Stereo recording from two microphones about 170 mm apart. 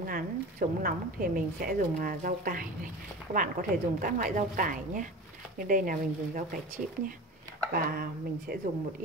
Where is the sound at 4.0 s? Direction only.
50° right (ahead or behind).